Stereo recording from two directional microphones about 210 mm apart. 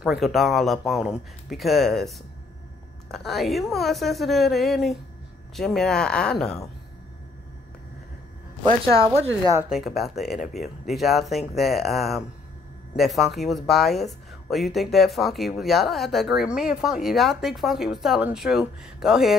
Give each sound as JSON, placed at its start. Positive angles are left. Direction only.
{"t": 0.0, "sound": "speech", "side_deg": 0}
{"t": 9.7, "sound": "speech", "side_deg": 0}